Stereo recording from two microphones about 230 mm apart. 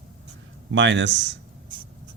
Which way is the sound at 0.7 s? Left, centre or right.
Right.